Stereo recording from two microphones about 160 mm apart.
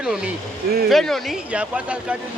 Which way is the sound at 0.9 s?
Centre (ahead or behind).